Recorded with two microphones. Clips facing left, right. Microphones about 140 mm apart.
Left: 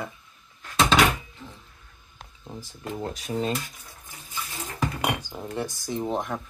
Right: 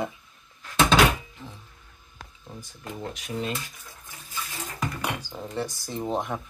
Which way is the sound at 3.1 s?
35° left (ahead or behind).